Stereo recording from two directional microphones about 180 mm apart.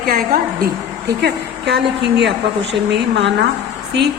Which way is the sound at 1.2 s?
70° right (ahead or behind).